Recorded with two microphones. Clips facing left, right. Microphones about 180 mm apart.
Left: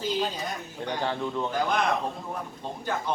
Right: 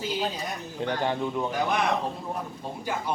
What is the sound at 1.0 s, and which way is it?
Speech, 15° right (ahead or behind).